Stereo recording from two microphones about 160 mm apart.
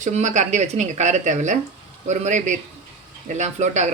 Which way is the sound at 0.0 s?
50° right (ahead or behind).